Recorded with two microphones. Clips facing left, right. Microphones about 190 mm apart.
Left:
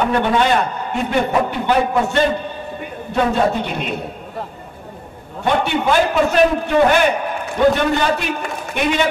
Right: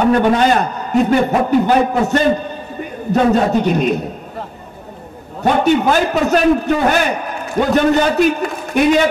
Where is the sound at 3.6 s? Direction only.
40° right (ahead or behind).